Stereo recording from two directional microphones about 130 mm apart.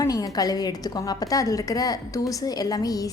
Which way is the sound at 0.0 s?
25° left (ahead or behind).